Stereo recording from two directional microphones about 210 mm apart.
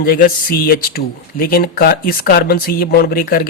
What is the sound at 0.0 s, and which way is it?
Speech, 45° left (ahead or behind).